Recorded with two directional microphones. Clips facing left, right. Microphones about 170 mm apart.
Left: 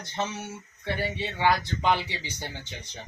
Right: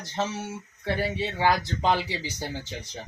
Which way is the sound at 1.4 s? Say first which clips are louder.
Even; 35° right (ahead or behind).